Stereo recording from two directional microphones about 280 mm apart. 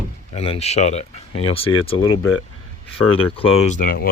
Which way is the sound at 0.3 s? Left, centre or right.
Left.